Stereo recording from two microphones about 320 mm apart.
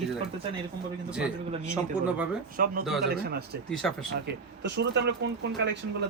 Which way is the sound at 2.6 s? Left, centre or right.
Right.